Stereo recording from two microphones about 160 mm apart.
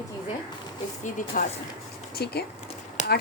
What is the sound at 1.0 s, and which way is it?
Speech, 55° left (ahead or behind).